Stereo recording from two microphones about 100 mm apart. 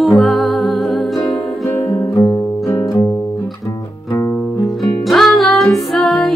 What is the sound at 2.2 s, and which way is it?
Guitar, 35° left (ahead or behind).